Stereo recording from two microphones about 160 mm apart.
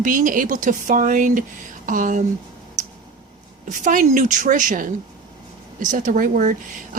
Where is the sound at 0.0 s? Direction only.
55° right (ahead or behind).